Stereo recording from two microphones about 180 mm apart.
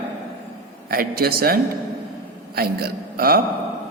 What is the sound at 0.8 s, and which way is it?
Speech, 55° right (ahead or behind).